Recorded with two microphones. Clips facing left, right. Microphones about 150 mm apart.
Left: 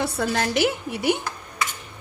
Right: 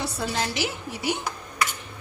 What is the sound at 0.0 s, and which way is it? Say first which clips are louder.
A woman's voice: left 4 dB; 55° left (ahead or behind).